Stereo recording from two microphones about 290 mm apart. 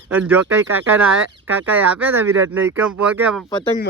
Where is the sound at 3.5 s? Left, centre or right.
Centre.